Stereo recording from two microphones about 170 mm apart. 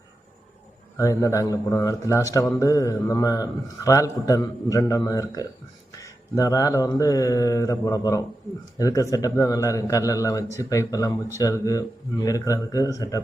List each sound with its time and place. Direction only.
0.9 s speech: 20° left (ahead or behind)